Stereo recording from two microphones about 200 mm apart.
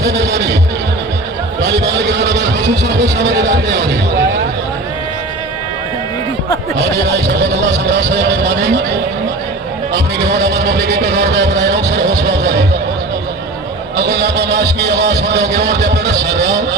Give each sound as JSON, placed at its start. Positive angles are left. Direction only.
{"t": 0.0, "sound": "speech", "side_deg": -15}
{"t": 1.6, "sound": "speech", "side_deg": -15}
{"t": 2.0, "sound": "speech", "side_deg": -60}
{"t": 6.7, "sound": "speech", "side_deg": -60}
{"t": 10.3, "sound": "a man's voice", "side_deg": -55}
{"t": 13.9, "sound": "a man's voice", "side_deg": -55}